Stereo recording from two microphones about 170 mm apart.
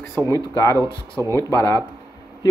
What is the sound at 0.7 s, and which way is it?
Speech, 20° right (ahead or behind).